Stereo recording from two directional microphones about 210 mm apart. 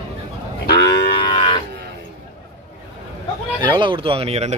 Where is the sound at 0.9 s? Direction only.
25° left (ahead or behind).